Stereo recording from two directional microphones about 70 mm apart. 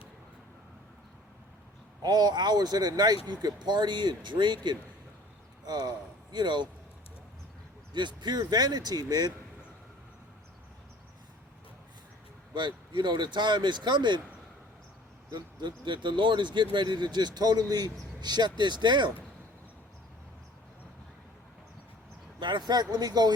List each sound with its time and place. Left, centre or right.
2.0 s speech: right
3.4 s speech: right
5.6 s speech: right
6.3 s speech: right
7.9 s speech: right
12.5 s speech: right
15.3 s speech: right
22.4 s speech: right